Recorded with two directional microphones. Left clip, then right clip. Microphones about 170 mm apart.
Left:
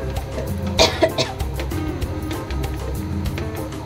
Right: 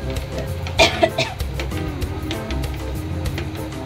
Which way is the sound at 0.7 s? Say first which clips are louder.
Right 1 dB; 90° left.